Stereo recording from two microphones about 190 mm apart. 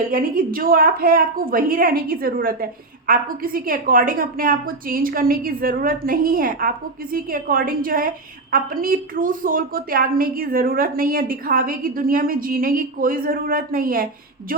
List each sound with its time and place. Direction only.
0.1 s a woman's voice: 50° right (ahead or behind)